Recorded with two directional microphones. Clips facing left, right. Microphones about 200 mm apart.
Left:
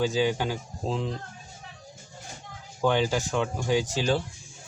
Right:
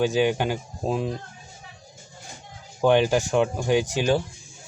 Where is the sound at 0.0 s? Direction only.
20° right (ahead or behind).